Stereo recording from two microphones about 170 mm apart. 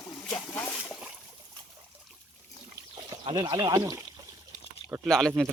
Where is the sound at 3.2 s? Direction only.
25° right (ahead or behind).